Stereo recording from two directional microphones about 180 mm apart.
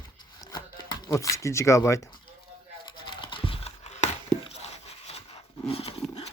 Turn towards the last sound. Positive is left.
turn(degrees=35)  # may be behind; listen again after turning